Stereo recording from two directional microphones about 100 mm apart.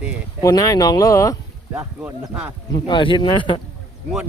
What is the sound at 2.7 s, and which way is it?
Speech, 50° left (ahead or behind).